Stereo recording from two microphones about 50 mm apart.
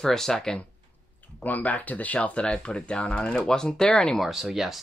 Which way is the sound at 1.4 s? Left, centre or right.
Left.